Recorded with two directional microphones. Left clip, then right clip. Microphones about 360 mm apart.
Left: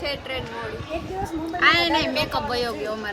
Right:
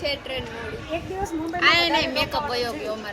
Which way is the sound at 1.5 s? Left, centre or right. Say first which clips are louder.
Even; centre.